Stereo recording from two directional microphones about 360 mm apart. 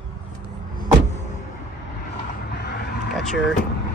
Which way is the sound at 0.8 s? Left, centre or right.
Centre.